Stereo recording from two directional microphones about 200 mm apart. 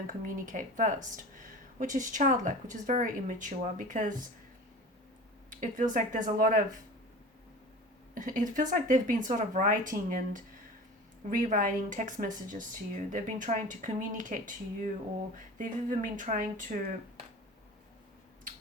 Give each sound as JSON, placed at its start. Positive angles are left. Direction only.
{"t": 0.1, "sound": "speech", "side_deg": -40}
{"t": 5.5, "sound": "speech", "side_deg": -40}
{"t": 8.1, "sound": "speech", "side_deg": -40}